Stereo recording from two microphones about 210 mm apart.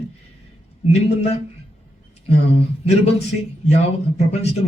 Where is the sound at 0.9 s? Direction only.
30° left (ahead or behind).